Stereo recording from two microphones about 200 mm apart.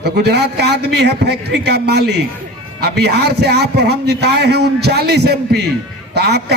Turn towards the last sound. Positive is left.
turn(degrees=-55)  # may be behind; listen again after turning